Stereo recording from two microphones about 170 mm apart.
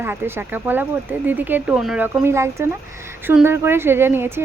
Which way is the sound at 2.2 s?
15° right (ahead or behind).